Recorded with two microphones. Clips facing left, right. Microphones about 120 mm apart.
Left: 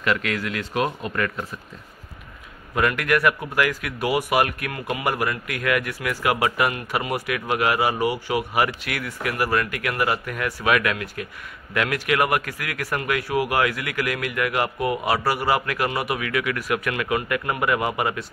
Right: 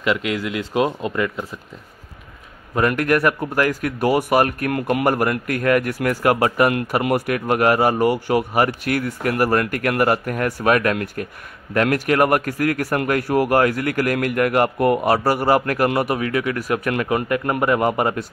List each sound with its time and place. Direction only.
0.0 s speech: 20° right (ahead or behind)
2.7 s a man's voice: 35° right (ahead or behind)